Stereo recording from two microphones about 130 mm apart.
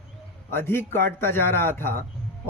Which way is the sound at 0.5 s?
20° left (ahead or behind).